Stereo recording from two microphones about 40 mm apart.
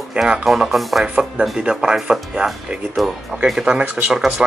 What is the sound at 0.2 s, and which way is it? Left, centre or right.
Speech, right.